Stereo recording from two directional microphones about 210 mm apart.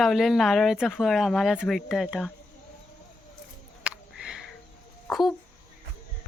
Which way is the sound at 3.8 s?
5° right (ahead or behind).